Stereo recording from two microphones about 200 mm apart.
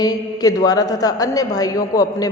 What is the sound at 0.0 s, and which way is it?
A man's voice, 20° left (ahead or behind).